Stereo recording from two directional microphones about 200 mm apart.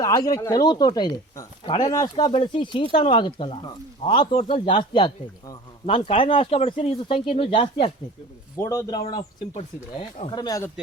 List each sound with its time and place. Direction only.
0.0 s a man's voice: 20° left (ahead or behind)
8.5 s a man's voice: 15° left (ahead or behind)